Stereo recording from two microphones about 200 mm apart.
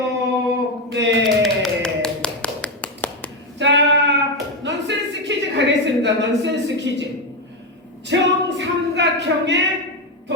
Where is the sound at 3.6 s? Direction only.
60° right (ahead or behind).